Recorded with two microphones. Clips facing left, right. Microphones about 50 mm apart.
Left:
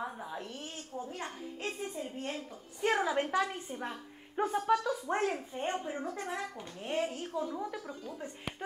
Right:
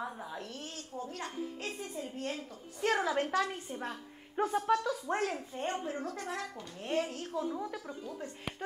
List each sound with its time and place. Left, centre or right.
0.0 s a sound: centre
0.9 s a woman's voice: left
4.4 s a woman's voice: centre
5.2 s a child's voice: centre